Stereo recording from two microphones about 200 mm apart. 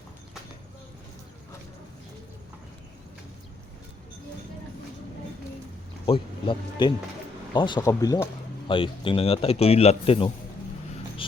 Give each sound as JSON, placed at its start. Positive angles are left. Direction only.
{"t": 6.1, "sound": "speech", "side_deg": 25}